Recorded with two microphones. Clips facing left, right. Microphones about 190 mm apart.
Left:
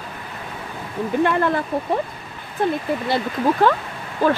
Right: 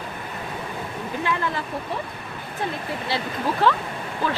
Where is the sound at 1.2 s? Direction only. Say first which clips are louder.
Left 7 dB; 55° left (ahead or behind).